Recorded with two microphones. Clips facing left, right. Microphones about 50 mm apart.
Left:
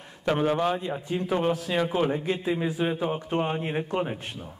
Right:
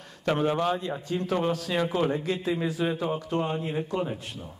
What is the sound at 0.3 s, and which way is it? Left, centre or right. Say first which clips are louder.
A man's voice: left 1 dB; centre.